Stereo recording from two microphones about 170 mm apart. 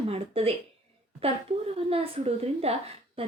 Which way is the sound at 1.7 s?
35° right (ahead or behind).